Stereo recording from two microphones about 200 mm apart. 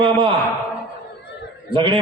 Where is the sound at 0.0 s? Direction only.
25° right (ahead or behind).